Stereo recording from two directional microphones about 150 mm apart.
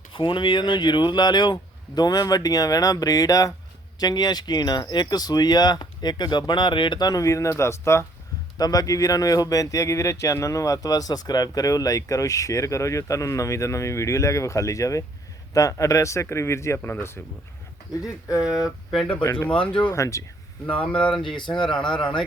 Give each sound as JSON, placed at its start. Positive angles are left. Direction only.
{"t": 0.1, "sound": "speech", "side_deg": 35}
{"t": 18.9, "sound": "speech", "side_deg": 5}
{"t": 19.2, "sound": "speech", "side_deg": 20}
{"t": 19.6, "sound": "speech", "side_deg": 10}
{"t": 19.9, "sound": "speech", "side_deg": 20}
{"t": 20.8, "sound": "speech", "side_deg": 10}
{"t": 21.3, "sound": "speech", "side_deg": 30}
{"t": 21.7, "sound": "speech", "side_deg": 5}